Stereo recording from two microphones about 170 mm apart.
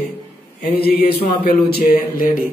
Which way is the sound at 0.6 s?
60° left (ahead or behind).